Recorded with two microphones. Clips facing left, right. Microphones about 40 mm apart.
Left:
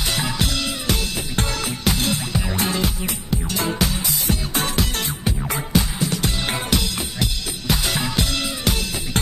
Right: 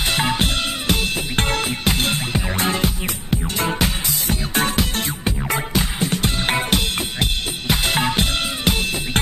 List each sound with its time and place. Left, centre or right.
0.0 s music: right
5.8 s music: right